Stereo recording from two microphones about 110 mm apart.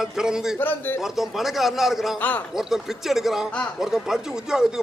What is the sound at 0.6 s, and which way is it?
Speech, 20° left (ahead or behind).